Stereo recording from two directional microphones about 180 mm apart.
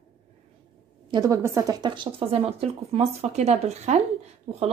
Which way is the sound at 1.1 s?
20° right (ahead or behind).